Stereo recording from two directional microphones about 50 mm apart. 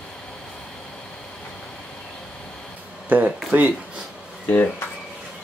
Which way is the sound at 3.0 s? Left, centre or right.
Right.